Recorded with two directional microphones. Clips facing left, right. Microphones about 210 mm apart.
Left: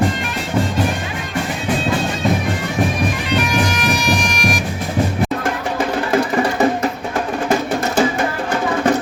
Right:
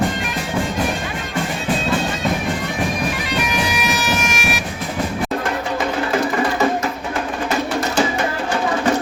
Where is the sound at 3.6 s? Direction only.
10° right (ahead or behind).